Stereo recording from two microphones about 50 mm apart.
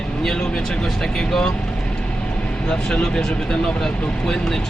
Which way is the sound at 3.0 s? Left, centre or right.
Centre.